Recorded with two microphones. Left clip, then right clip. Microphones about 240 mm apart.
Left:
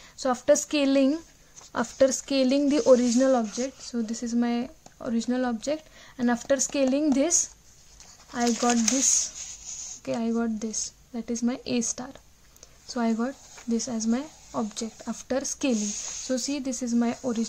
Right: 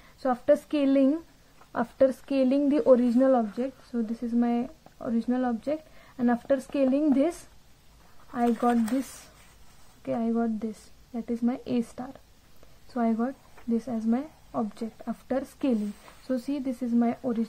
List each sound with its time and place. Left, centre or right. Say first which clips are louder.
0.2 s speech: left 1 dB; left
10.0 s speech: even; left